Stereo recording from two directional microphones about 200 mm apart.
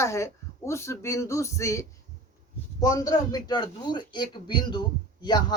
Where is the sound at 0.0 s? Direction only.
15° left (ahead or behind).